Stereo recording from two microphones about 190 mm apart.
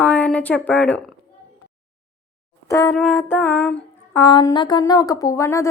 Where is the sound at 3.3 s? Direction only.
10° left (ahead or behind).